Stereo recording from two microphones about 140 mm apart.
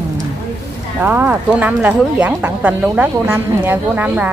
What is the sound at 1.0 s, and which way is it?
A woman's voice, 15° right (ahead or behind).